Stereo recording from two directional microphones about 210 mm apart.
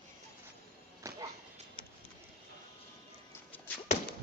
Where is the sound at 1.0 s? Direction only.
15° right (ahead or behind).